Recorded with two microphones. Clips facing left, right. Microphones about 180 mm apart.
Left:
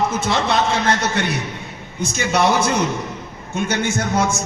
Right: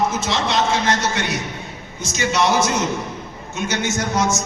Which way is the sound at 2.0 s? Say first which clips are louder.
Left 2 dB; 55° left (ahead or behind).